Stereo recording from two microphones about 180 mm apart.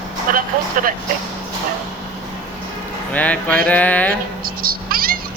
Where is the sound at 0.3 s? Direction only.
50° right (ahead or behind).